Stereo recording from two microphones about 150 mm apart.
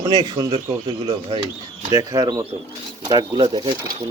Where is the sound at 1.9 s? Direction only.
20° right (ahead or behind).